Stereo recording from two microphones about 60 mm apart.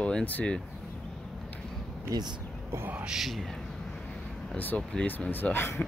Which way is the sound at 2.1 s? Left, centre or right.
Right.